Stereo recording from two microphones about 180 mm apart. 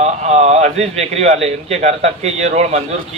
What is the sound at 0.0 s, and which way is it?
A man's voice, 40° right (ahead or behind).